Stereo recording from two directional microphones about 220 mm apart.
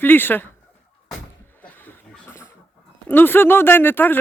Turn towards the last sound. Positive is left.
turn(degrees=10)  # may be behind; listen again after turning